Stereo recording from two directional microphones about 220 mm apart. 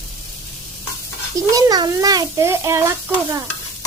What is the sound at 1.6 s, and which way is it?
A child's voice, 15° right (ahead or behind).